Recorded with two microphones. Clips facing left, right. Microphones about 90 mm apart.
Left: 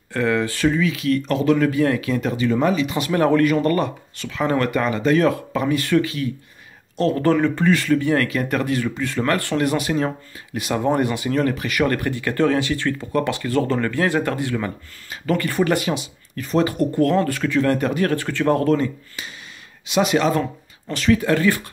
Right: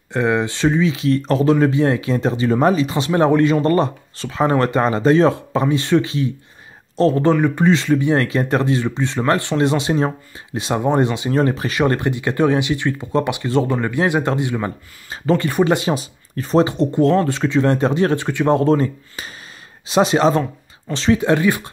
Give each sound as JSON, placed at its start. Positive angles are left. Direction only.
{"t": 0.1, "sound": "speech", "side_deg": -20}
{"t": 7.3, "sound": "speech", "side_deg": -15}
{"t": 15.9, "sound": "speech", "side_deg": -35}